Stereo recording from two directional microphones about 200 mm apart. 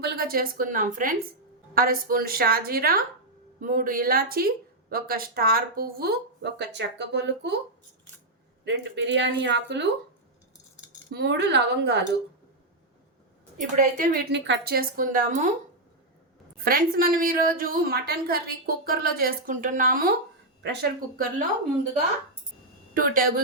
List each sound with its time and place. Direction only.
0.0 s a woman's voice: 50° right (ahead or behind)
8.6 s speech: 60° right (ahead or behind)
11.1 s speech: 60° right (ahead or behind)
13.6 s a woman's voice: 40° right (ahead or behind)
16.6 s a woman's voice: 45° right (ahead or behind)
20.6 s speech: 60° right (ahead or behind)
23.0 s a woman's voice: 45° right (ahead or behind)